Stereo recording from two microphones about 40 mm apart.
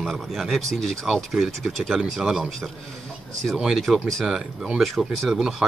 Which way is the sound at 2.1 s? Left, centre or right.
Centre.